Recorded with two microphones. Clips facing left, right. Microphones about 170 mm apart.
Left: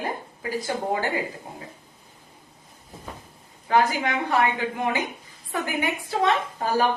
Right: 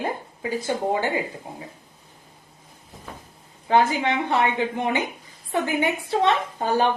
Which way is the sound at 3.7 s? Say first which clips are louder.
Right 2 dB; 25° right (ahead or behind).